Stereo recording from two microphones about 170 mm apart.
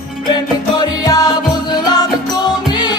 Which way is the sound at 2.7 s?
25° left (ahead or behind).